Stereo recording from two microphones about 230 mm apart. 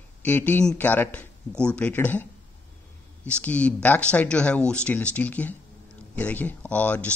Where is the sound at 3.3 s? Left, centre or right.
Centre.